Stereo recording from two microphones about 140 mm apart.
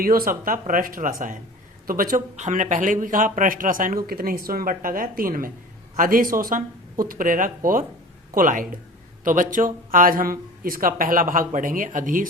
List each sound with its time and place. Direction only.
0.0 s speech: 90° right
6.4 s speech: 75° right (ahead or behind)